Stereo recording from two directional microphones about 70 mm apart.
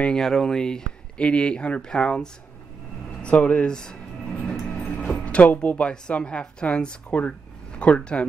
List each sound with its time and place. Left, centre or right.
0.2 s a woman's voice: centre
4.4 s train: centre
5.2 s a woman's voice: centre